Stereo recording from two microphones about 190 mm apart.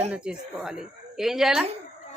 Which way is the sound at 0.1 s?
5° right (ahead or behind).